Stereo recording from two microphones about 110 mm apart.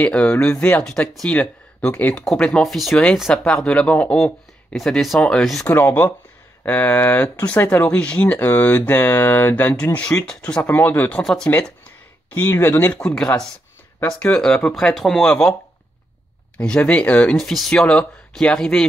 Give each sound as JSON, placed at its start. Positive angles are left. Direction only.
{"t": 0.0, "sound": "speech", "side_deg": 15}
{"t": 5.7, "sound": "speech", "side_deg": 20}
{"t": 11.6, "sound": "a sound", "side_deg": 10}
{"t": 12.4, "sound": "speech", "side_deg": 25}
{"t": 16.5, "sound": "speech", "side_deg": 10}